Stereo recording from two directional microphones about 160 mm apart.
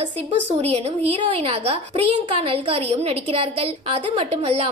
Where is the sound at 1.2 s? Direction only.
30° right (ahead or behind).